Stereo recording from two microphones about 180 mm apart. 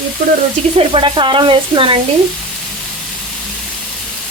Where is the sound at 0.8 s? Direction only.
30° right (ahead or behind).